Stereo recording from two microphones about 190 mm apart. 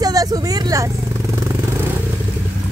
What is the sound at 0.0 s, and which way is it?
Vehicle, 20° right (ahead or behind).